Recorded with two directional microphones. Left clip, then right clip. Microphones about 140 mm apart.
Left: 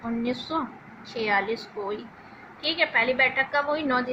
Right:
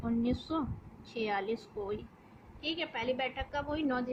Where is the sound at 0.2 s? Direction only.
70° right (ahead or behind).